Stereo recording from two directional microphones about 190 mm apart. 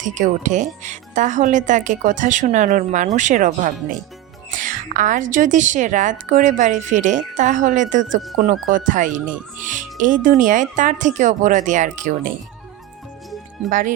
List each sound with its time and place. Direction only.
0.0 s a woman's voice: 40° right (ahead or behind)
13.7 s speech: 45° right (ahead or behind)